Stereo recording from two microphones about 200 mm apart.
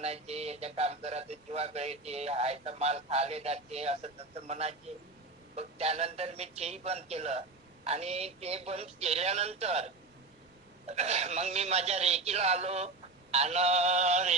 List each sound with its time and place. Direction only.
0.0 s speech: 30° right (ahead or behind)